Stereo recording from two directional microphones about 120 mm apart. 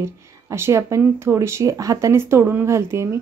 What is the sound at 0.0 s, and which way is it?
A woman's voice, 25° right (ahead or behind).